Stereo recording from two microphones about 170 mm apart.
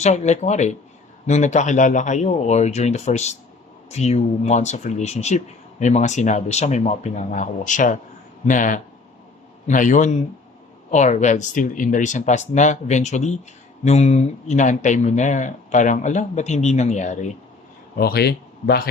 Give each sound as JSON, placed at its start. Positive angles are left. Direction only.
{"t": 0.0, "sound": "speech", "side_deg": 40}
{"t": 17.9, "sound": "speech", "side_deg": 65}